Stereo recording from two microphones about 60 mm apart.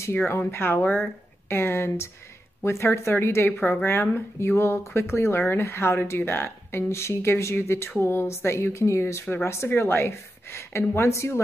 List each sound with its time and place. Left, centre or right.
0.1 s speech: left